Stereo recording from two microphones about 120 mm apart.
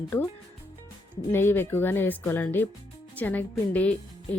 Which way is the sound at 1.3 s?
20° left (ahead or behind).